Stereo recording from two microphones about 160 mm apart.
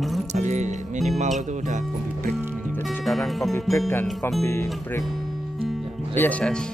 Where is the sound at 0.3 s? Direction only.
50° right (ahead or behind).